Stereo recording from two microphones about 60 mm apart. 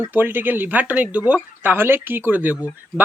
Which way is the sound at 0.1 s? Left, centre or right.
Right.